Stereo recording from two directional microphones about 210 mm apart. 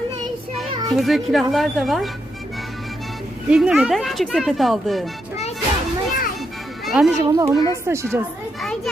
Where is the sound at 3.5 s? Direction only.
5° right (ahead or behind).